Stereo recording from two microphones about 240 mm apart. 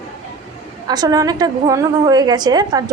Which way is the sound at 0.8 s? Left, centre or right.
Centre.